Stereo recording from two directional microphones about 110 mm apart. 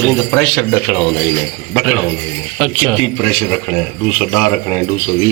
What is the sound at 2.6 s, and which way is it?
Speech, 10° left (ahead or behind).